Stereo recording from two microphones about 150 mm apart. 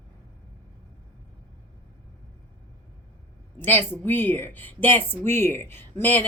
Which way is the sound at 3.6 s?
15° left (ahead or behind).